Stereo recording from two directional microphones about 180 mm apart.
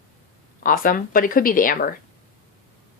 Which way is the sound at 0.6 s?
50° left (ahead or behind).